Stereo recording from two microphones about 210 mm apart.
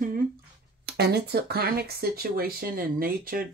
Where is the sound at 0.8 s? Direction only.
50° right (ahead or behind).